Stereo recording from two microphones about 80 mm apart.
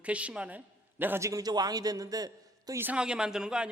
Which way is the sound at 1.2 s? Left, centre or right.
Right.